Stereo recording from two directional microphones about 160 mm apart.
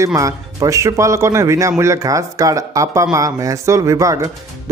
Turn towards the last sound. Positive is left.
turn(degrees=-20)  # may be behind; listen again after turning